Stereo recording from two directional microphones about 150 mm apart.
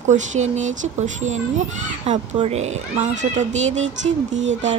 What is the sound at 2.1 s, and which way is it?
Speech, 45° right (ahead or behind).